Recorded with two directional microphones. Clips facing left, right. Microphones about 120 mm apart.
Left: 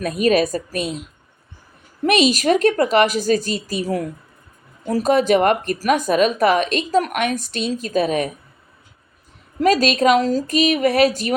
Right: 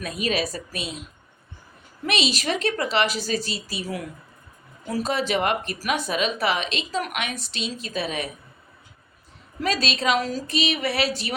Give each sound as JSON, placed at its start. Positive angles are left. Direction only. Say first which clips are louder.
{"t": 0.0, "sound": "speech", "louder": "left 9 dB", "side_deg": 45}
{"t": 2.0, "sound": "speech", "louder": "left 9 dB", "side_deg": 45}
{"t": 9.6, "sound": "speech", "louder": "left 10 dB", "side_deg": 45}